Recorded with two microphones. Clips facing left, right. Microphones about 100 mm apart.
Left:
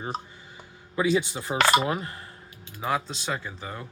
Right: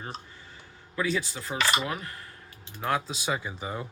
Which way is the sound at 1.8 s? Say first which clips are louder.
Left 5 dB; 25° left (ahead or behind).